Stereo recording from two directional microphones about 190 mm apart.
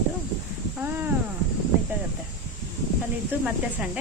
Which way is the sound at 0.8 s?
10° right (ahead or behind).